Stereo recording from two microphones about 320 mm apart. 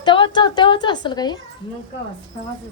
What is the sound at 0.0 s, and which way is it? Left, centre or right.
A woman's voice, centre.